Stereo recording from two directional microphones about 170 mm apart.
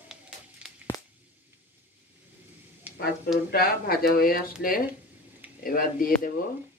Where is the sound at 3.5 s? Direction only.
60° left (ahead or behind).